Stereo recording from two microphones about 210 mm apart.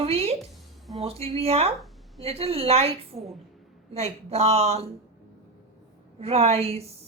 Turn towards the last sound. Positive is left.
turn(degrees=-30)  # may be behind; listen again after turning